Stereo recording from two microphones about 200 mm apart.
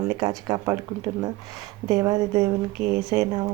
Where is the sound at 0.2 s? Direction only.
15° right (ahead or behind).